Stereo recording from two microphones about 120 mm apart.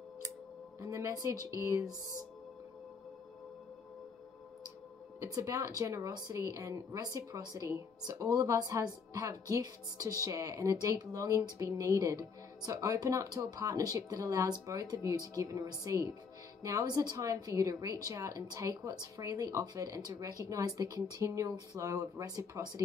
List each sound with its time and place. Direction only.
0.7 s a woman's voice: 25° right (ahead or behind)
5.2 s a woman's voice: 25° right (ahead or behind)